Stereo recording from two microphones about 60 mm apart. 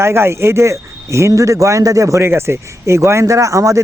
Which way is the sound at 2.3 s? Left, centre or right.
Right.